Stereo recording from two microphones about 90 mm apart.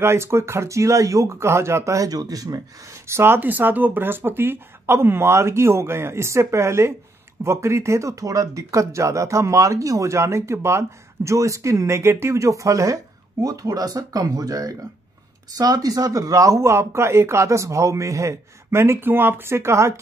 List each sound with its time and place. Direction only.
0.0 s speech: 30° right (ahead or behind)